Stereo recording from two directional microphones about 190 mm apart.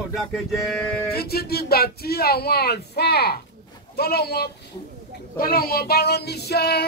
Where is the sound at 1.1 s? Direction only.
55° left (ahead or behind).